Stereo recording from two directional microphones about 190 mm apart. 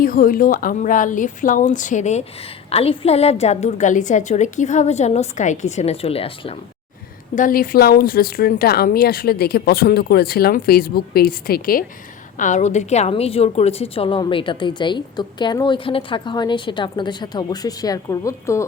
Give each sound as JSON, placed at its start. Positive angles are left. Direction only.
{"t": 0.0, "sound": "a woman's voice", "side_deg": 45}
{"t": 7.3, "sound": "a woman's voice", "side_deg": 45}